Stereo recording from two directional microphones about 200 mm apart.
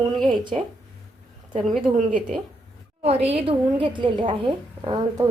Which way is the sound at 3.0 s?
30° right (ahead or behind).